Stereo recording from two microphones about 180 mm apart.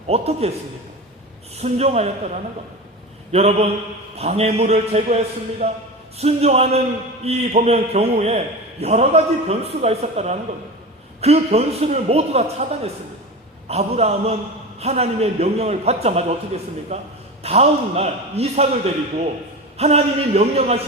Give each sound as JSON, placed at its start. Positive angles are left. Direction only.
{"t": 0.1, "sound": "a man's voice", "side_deg": -35}
{"t": 1.6, "sound": "a man's voice", "side_deg": -35}